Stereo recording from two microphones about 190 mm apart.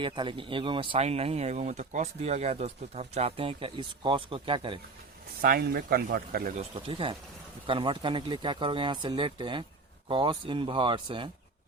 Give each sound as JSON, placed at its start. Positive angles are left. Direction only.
{"t": 0.0, "sound": "speech", "side_deg": -25}
{"t": 5.4, "sound": "speech", "side_deg": -50}
{"t": 6.7, "sound": "speech", "side_deg": -30}